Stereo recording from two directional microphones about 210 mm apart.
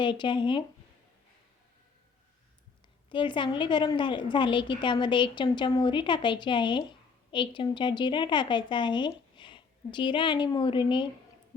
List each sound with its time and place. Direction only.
0.0 s a woman's voice: 20° left (ahead or behind)
3.1 s a woman's voice: 25° left (ahead or behind)